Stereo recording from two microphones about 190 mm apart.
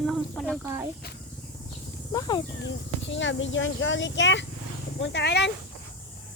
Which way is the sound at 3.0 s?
75° left (ahead or behind).